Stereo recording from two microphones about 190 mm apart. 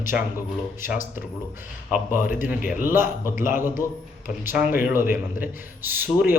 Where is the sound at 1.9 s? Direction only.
45° left (ahead or behind).